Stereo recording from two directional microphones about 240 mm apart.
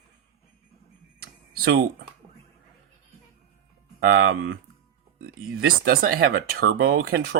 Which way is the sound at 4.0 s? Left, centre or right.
Right.